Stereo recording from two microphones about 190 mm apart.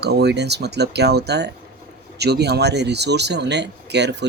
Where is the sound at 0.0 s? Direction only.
60° right (ahead or behind).